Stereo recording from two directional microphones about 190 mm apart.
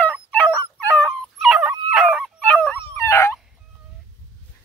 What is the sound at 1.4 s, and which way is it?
Dog, 5° right (ahead or behind).